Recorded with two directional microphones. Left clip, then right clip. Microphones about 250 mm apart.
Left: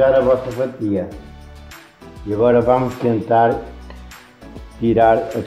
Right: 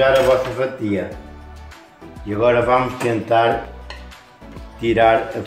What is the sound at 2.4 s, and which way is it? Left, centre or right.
Speech, left.